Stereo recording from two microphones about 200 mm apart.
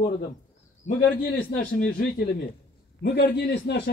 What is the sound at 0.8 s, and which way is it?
A man's voice, 45° left (ahead or behind).